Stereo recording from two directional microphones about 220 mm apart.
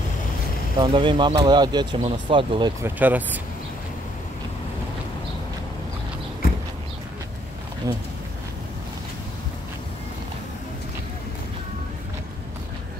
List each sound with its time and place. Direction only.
0.7 s speech: 25° right (ahead or behind)
2.8 s speech: 10° right (ahead or behind)